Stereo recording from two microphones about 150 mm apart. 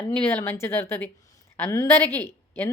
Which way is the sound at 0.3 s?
15° left (ahead or behind).